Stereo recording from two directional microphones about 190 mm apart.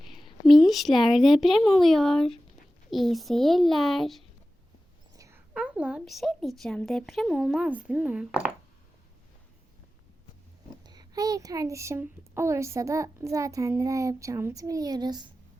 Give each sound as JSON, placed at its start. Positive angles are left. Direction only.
{"t": 0.0, "sound": "a sound", "side_deg": 0}
{"t": 0.5, "sound": "speech", "side_deg": 0}
{"t": 5.1, "sound": "whispering", "side_deg": -15}
{"t": 5.5, "sound": "speech", "side_deg": -5}
{"t": 10.8, "sound": "speech", "side_deg": -20}